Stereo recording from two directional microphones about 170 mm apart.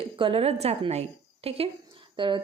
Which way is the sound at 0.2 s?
35° right (ahead or behind).